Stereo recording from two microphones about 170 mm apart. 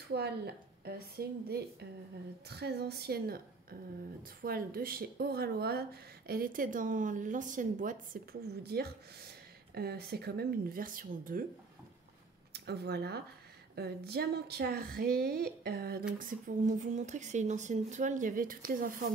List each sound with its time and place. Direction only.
0.1 s a woman's voice: 70° right (ahead or behind); by 11.4 s 55° right (ahead or behind)
12.5 s speech: 75° right (ahead or behind)
16.2 s speech: 55° right (ahead or behind)